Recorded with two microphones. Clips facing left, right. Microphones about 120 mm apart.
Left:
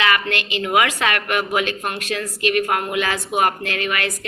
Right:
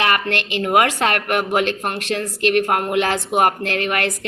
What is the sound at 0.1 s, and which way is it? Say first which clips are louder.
A woman's voice: right 1 dB; 55° right (ahead or behind).